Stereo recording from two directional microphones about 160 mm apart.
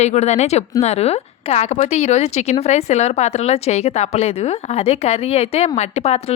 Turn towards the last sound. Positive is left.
turn(degrees=40)  # may be behind; listen again after turning